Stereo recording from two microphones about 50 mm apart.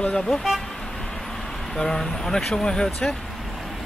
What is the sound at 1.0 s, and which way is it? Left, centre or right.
Vehicle, centre.